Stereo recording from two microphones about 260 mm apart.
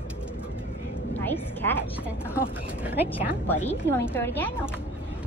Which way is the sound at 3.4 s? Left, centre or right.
Centre.